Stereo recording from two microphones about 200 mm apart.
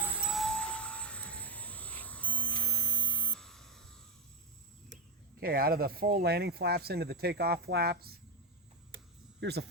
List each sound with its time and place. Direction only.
0.0 s vehicle: 5° right (ahead or behind)
2.6 s a sound: 5° left (ahead or behind)
5.4 s speech: 50° right (ahead or behind)
9.4 s speech: 55° right (ahead or behind)